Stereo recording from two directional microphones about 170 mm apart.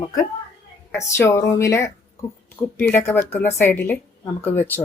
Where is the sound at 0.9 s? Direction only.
15° left (ahead or behind).